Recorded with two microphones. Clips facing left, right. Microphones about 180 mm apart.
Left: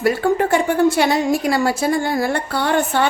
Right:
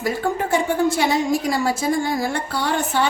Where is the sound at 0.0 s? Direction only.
65° left (ahead or behind).